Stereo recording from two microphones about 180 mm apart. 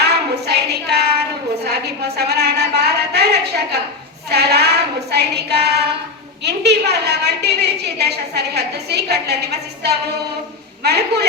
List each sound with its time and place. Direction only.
0.0 s a sound: 65° right (ahead or behind)
4.3 s child singing: 65° right (ahead or behind)
6.4 s a woman's voice: 70° right (ahead or behind)